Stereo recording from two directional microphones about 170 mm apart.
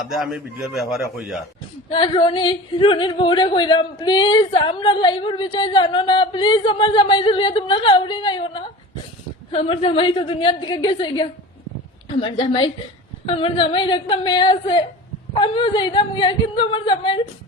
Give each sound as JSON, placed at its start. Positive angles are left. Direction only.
{"t": 0.1, "sound": "a man's voice", "side_deg": -5}
{"t": 1.9, "sound": "a woman's voice", "side_deg": 30}